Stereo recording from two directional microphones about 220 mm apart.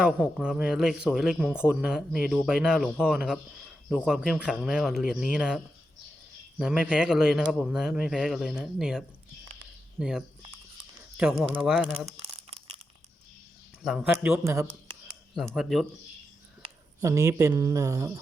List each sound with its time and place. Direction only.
0.0 s speech: 5° right (ahead or behind)
6.6 s speech: 5° right (ahead or behind)
13.8 s speech: 5° right (ahead or behind)
15.5 s speech: centre (ahead or behind)
16.6 s speech: 15° right (ahead or behind)